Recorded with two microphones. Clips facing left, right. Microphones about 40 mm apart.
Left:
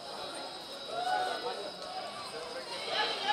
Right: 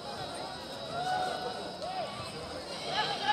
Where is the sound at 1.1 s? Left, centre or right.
Centre.